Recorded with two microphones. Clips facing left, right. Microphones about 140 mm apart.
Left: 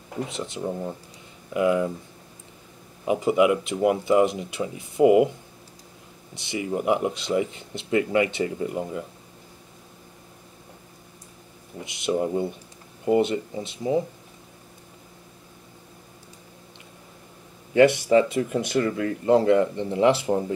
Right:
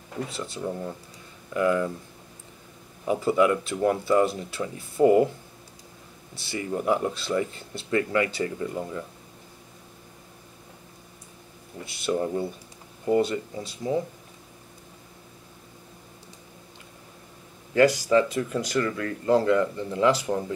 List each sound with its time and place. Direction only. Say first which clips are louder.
0.1 s speech: left 2 dB; 20° left (ahead or behind)
3.1 s speech: left 2 dB; 15° left (ahead or behind)
6.3 s speech: left 2 dB; 20° left (ahead or behind)
11.8 s speech: left 2 dB; 20° left (ahead or behind)
17.7 s speech: left 3 dB; 25° left (ahead or behind)